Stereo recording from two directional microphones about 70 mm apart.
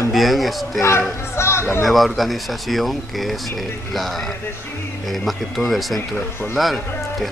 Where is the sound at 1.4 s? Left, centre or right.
Left.